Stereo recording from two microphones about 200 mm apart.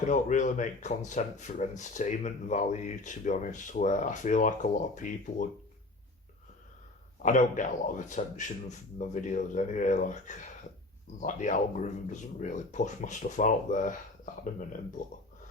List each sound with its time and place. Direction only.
0.1 s speech: 40° left (ahead or behind)
7.2 s speech: 40° left (ahead or behind)